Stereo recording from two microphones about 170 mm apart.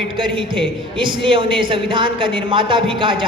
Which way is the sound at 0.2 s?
30° right (ahead or behind).